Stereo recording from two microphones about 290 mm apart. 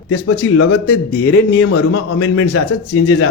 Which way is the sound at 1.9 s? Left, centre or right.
Left.